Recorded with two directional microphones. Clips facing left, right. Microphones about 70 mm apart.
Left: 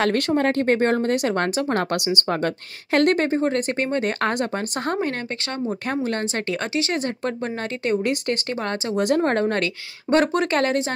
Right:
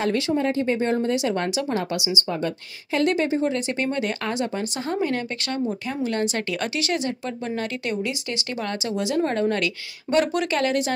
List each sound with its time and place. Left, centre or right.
0.0 s a woman's voice: left
8.0 s speech: left
8.5 s a woman's voice: left